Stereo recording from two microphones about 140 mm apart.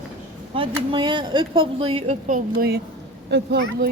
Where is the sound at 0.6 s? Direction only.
35° right (ahead or behind); by 2.7 s 80° right.